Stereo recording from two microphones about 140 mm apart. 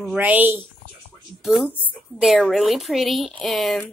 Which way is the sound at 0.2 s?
10° right (ahead or behind).